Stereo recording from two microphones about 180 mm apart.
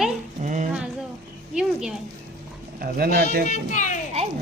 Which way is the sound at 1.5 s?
5° right (ahead or behind).